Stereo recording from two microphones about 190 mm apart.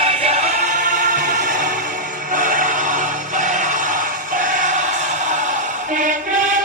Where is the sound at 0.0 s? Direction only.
35° right (ahead or behind).